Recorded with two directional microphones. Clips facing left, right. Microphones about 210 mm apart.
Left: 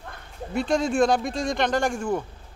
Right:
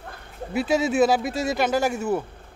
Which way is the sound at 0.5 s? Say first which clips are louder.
Right 1 dB; 5° right (ahead or behind).